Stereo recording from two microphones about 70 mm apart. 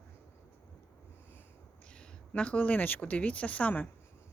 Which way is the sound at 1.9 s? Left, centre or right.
Centre.